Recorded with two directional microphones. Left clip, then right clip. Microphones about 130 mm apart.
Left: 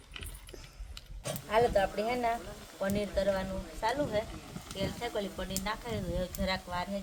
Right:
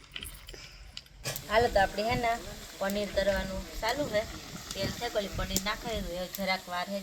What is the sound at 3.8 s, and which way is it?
Speech, 20° left (ahead or behind).